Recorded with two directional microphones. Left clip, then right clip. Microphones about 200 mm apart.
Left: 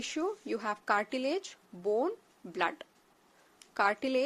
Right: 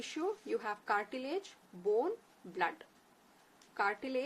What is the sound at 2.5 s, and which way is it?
Speech, 50° left (ahead or behind).